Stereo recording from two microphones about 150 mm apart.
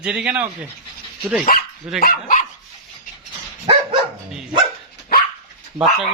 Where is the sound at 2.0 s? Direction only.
65° left (ahead or behind).